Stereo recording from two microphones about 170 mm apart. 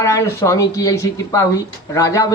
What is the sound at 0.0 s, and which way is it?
A man's voice, 15° left (ahead or behind).